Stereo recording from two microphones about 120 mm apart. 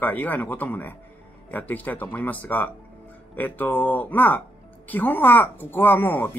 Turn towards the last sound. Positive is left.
turn(degrees=15)  # may be behind; listen again after turning